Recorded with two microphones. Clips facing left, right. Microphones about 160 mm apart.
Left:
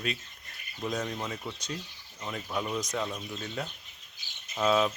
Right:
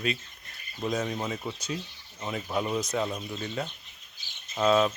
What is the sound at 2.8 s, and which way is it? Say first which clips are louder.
Speech: right 3 dB; 5° right (ahead or behind).